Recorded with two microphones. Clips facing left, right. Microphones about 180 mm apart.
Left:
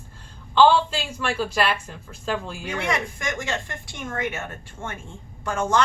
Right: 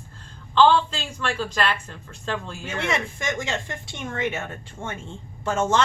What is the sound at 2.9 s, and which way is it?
Speech, 25° right (ahead or behind).